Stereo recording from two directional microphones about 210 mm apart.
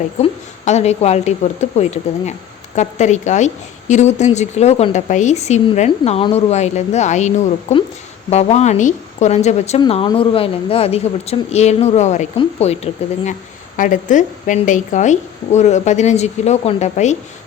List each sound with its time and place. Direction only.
0.2 s a woman's voice: 30° left (ahead or behind)